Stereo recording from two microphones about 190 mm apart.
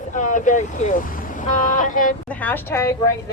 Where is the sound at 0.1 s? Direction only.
40° left (ahead or behind).